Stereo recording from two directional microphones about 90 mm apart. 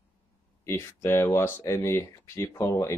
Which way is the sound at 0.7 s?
30° left (ahead or behind).